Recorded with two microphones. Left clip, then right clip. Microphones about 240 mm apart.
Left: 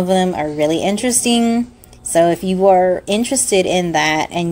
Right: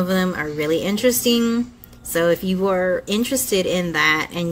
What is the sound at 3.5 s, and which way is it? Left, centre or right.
Speech, centre.